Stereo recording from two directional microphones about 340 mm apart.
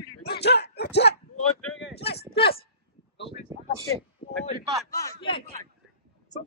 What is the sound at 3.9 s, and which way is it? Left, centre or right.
A man's voice, centre.